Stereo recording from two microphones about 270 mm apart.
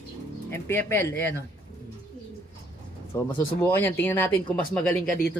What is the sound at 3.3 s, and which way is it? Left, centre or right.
Speech, centre.